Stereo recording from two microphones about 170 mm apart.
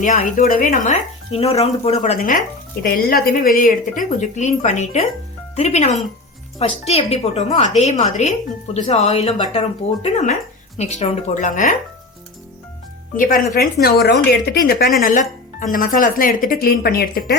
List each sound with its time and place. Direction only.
0.0 s speech: 50° left (ahead or behind)
1.3 s speech: 35° left (ahead or behind)
2.1 s speech: 55° left (ahead or behind)
13.1 s speech: 55° left (ahead or behind)
14.9 s speech: 50° left (ahead or behind)